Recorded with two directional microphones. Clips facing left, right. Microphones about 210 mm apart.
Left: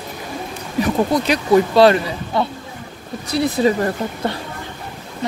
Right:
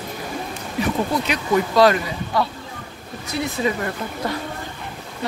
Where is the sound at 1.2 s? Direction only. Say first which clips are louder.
Left 6 dB; 35° left (ahead or behind).